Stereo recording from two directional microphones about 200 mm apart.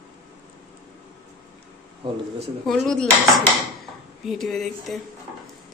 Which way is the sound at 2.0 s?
25° right (ahead or behind).